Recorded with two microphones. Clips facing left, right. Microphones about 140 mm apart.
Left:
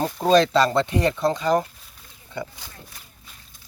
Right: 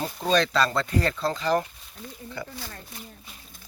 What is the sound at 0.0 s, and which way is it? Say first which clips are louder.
Speech: left 6 dB; 40° left (ahead or behind).